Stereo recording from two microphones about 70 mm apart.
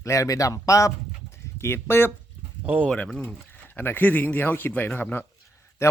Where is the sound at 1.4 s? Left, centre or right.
Left.